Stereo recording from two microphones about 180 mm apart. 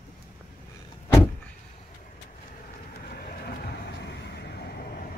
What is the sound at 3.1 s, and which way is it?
Vehicle, 55° left (ahead or behind).